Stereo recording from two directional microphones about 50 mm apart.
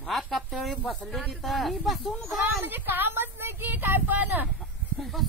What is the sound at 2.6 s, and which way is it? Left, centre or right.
Speech, right.